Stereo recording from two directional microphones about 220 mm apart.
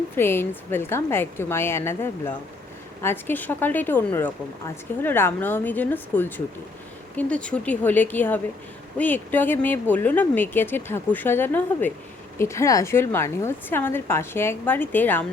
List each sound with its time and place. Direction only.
0.2 s speech: 10° left (ahead or behind)